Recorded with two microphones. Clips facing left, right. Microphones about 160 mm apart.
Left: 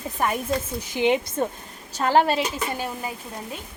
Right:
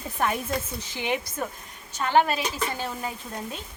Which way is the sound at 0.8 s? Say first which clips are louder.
Left 7 dB; 20° left (ahead or behind).